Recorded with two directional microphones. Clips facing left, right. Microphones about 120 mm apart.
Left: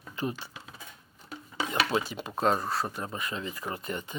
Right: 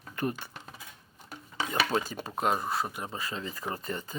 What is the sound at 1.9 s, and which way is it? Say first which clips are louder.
Speech: left 1 dB; 40° right (ahead or behind).